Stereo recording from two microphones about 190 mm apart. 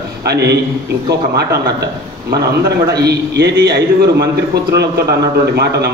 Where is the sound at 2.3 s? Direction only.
60° right (ahead or behind).